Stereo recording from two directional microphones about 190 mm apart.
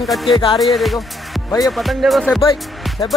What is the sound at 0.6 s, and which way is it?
Speech, centre (ahead or behind).